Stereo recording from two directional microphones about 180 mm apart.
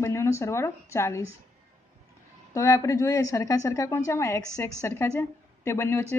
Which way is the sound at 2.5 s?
15° left (ahead or behind).